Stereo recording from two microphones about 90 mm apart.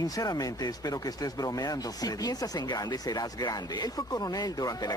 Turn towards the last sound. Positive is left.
turn(degrees=45)  # may be behind; listen again after turning